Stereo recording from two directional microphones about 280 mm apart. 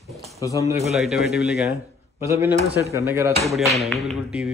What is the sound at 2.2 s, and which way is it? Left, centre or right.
Speech, centre.